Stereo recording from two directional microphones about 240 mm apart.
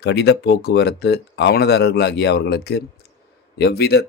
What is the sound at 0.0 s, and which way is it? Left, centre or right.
Speech, left.